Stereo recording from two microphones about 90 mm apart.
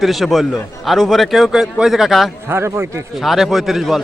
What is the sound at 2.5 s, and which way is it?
Speech, 25° right (ahead or behind).